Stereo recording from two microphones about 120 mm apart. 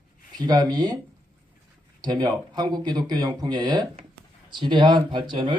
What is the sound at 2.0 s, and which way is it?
Speech, 35° right (ahead or behind).